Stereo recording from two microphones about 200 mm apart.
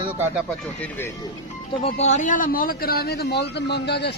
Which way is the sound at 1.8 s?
35° left (ahead or behind).